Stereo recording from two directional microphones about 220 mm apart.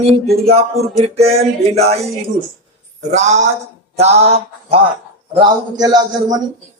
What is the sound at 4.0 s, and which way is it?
Music, 30° right (ahead or behind).